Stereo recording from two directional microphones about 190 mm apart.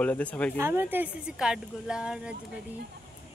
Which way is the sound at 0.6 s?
10° right (ahead or behind).